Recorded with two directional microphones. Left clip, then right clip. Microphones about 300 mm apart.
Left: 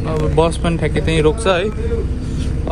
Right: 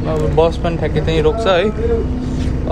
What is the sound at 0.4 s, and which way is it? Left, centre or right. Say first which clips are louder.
Speech: right 1 dB; left.